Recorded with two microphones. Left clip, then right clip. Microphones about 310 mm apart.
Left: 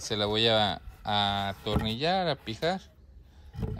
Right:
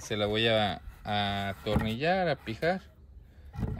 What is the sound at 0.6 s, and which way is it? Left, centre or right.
Speech, left.